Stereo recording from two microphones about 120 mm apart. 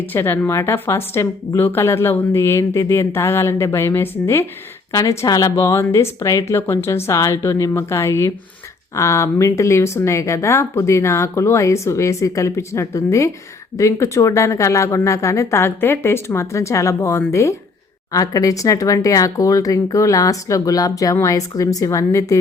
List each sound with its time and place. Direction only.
0.0 s a woman's voice: 20° left (ahead or behind)